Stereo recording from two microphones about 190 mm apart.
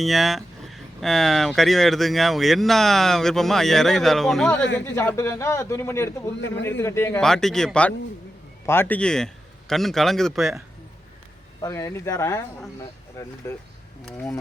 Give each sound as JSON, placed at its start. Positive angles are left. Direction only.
{"t": 0.0, "sound": "speech", "side_deg": 0}
{"t": 4.8, "sound": "speech", "side_deg": 15}
{"t": 11.6, "sound": "speech", "side_deg": 15}